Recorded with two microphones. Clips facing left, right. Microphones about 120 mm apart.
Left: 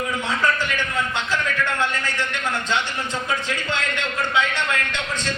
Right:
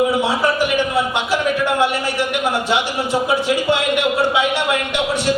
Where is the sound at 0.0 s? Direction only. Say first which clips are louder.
Right 7 dB; 15° right (ahead or behind).